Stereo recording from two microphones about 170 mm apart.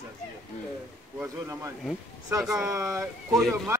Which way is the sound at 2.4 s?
5° right (ahead or behind).